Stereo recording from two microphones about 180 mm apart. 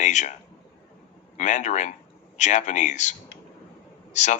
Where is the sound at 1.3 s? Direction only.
40° left (ahead or behind).